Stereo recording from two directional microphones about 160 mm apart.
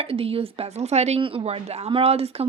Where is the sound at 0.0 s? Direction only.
35° right (ahead or behind).